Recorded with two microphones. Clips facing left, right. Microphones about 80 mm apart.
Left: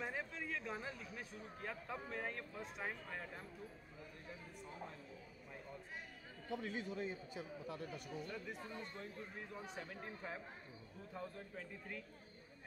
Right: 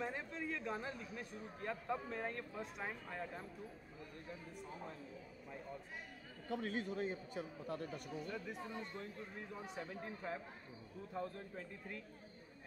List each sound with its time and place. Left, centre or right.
0.0 s a man's voice: centre
6.5 s a man's voice: right
8.3 s a man's voice: centre